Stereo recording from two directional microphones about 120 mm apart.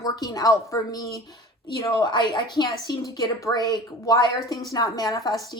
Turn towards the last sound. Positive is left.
turn(degrees=35)  # may be behind; listen again after turning